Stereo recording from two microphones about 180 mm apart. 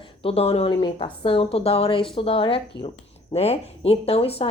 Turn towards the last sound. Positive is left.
turn(degrees=35)  # may be behind; listen again after turning